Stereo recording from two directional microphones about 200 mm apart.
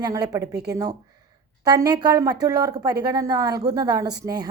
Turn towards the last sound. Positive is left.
turn(degrees=-20)  # may be behind; listen again after turning